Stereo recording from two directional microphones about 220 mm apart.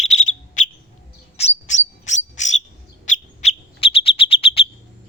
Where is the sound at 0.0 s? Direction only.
35° left (ahead or behind).